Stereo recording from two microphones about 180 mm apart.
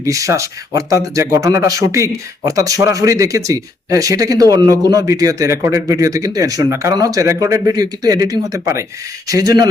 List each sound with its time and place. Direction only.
0.0 s speech: 15° right (ahead or behind)